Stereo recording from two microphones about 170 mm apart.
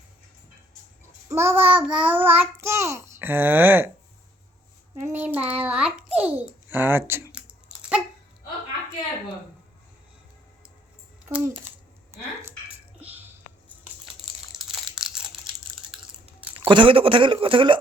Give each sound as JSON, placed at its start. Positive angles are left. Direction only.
{"t": 1.3, "sound": "child singing", "side_deg": -15}
{"t": 5.0, "sound": "a child's voice", "side_deg": -10}
{"t": 11.3, "sound": "child singing", "side_deg": -10}
{"t": 12.1, "sound": "a sound", "side_deg": -15}
{"t": 14.5, "sound": "crushing", "side_deg": 0}
{"t": 16.6, "sound": "speech", "side_deg": -30}